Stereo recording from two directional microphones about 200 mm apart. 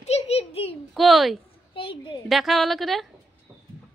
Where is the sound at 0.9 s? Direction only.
Centre (ahead or behind).